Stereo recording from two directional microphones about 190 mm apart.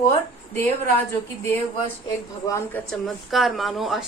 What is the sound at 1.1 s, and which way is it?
A woman's voice, 15° left (ahead or behind).